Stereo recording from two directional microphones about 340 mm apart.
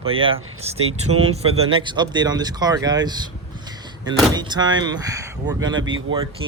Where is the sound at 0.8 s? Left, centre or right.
Right.